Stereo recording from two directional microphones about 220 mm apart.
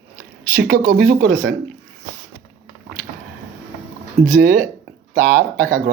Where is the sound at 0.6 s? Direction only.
45° right (ahead or behind).